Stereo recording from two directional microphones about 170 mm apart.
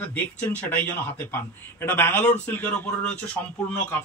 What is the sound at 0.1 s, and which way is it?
A man's voice, 10° left (ahead or behind).